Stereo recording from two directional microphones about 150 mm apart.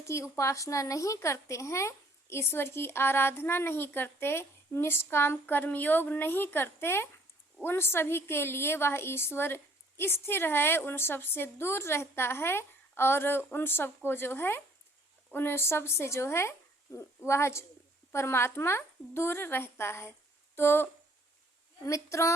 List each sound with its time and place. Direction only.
0.0 s a woman's voice: 20° left (ahead or behind)